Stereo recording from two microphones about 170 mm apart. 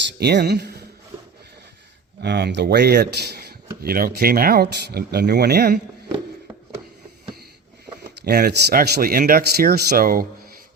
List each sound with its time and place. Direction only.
0.2 s speech: 75° right (ahead or behind)
2.2 s speech: 85° right
3.8 s speech: 60° right (ahead or behind)
8.2 s speech: 65° right (ahead or behind)